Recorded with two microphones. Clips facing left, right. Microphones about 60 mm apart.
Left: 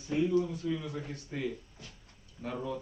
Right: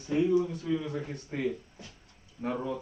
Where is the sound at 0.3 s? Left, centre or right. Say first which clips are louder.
Right 3 dB; centre.